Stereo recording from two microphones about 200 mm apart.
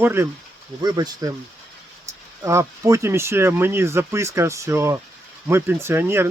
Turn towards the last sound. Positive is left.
turn(degrees=-10)  # may be behind; listen again after turning